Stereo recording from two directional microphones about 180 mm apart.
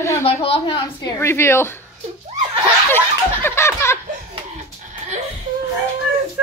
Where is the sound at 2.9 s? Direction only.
10° left (ahead or behind).